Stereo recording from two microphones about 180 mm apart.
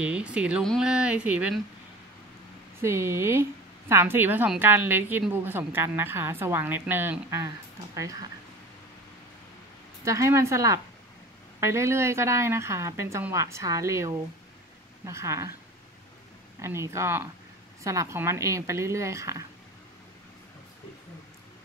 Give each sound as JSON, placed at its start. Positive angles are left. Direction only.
{"t": 0.0, "sound": "a woman's voice", "side_deg": -5}
{"t": 2.8, "sound": "a woman's voice", "side_deg": -15}
{"t": 10.0, "sound": "a woman's voice", "side_deg": -15}
{"t": 16.6, "sound": "a woman's voice", "side_deg": -15}